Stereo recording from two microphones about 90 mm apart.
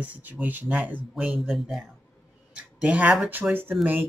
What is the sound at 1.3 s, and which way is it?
Speech, centre (ahead or behind).